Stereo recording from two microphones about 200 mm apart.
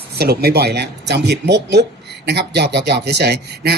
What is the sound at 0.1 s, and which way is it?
Speech, 50° right (ahead or behind).